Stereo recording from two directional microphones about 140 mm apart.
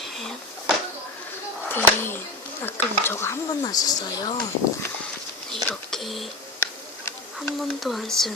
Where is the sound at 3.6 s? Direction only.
30° left (ahead or behind).